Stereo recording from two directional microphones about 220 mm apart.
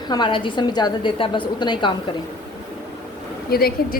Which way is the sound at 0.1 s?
20° left (ahead or behind).